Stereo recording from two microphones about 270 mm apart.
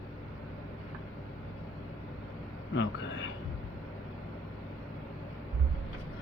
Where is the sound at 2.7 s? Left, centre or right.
Left.